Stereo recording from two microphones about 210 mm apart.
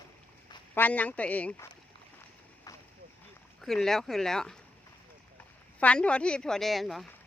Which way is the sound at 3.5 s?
Centre (ahead or behind).